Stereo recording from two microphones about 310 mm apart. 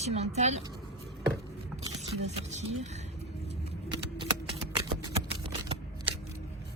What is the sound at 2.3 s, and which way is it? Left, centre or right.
Speech, right.